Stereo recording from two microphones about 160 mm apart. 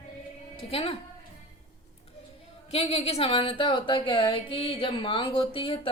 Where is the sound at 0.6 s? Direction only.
35° left (ahead or behind).